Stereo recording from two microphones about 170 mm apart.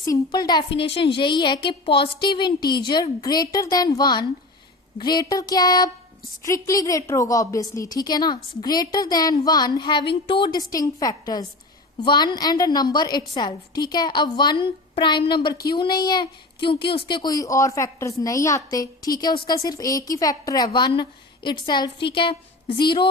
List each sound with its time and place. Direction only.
0.0 s a woman's voice: 20° left (ahead or behind)